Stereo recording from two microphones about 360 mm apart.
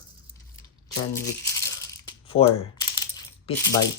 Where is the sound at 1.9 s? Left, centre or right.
Centre.